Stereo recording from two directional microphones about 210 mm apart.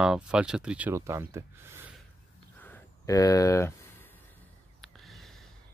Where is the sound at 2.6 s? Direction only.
10° left (ahead or behind).